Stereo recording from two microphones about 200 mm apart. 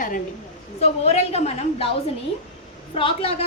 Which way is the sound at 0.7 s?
30° left (ahead or behind).